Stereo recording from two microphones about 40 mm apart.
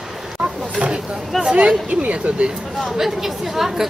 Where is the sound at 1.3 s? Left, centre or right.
Centre.